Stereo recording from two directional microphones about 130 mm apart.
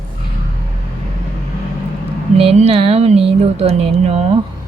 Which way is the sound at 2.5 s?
50° right (ahead or behind).